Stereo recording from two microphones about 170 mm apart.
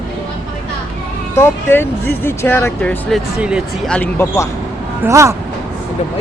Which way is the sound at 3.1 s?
5° right (ahead or behind).